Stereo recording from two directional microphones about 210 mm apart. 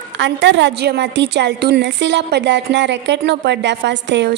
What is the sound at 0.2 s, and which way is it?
A woman's voice, 60° right (ahead or behind).